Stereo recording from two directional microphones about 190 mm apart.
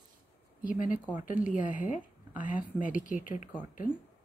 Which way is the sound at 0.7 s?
45° left (ahead or behind).